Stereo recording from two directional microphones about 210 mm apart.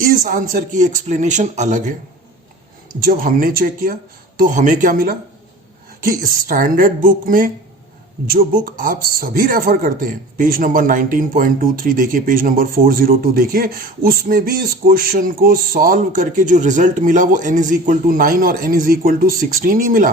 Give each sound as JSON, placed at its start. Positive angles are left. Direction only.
{"t": 0.0, "sound": "a man's voice", "side_deg": -40}
{"t": 3.0, "sound": "a man's voice", "side_deg": -40}